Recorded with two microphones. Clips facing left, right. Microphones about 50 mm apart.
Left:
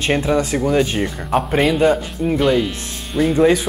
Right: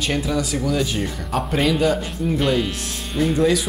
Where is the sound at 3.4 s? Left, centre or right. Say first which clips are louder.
Left 5 dB; left.